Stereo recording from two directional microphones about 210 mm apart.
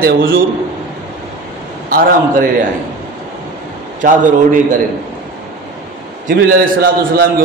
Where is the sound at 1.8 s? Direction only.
45° right (ahead or behind).